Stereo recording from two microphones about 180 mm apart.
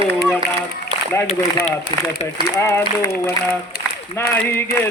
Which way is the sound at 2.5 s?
15° left (ahead or behind).